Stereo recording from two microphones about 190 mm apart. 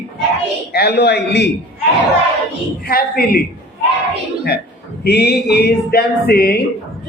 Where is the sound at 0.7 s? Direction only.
55° left (ahead or behind).